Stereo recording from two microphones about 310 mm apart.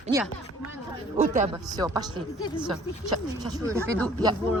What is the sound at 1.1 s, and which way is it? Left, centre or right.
Speech, right.